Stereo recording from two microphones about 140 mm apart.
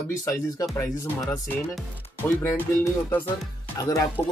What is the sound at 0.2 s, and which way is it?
Speech, 20° left (ahead or behind).